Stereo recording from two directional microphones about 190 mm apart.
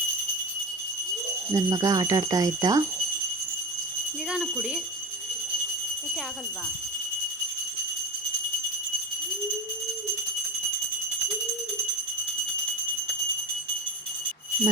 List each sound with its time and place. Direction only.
1.5 s speech: 20° right (ahead or behind)
4.3 s speech: 5° right (ahead or behind)